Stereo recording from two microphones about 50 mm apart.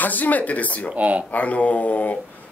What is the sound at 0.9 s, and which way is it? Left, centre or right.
Speech, right.